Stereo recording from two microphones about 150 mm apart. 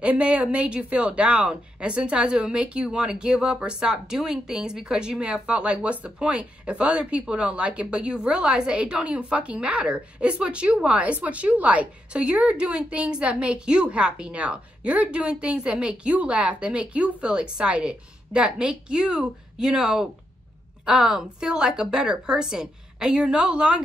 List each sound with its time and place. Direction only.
0.0 s a woman's voice: 10° right (ahead or behind)